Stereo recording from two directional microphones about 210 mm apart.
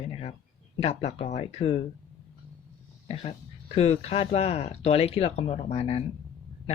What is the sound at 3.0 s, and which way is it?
A woman's voice, 30° left (ahead or behind).